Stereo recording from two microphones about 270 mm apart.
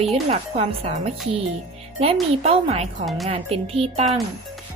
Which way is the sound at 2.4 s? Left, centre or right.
Right.